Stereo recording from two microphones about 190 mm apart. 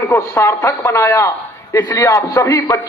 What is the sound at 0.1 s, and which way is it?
A man's voice, 15° left (ahead or behind).